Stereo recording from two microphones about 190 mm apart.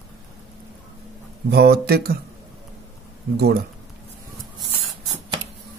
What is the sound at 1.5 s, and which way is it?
Speech, 55° right (ahead or behind).